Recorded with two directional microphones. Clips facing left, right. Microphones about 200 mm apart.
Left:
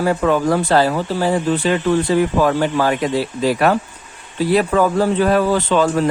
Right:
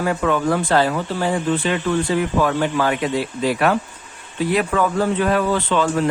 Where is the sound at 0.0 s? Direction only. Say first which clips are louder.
Left 3 dB; 35° left (ahead or behind).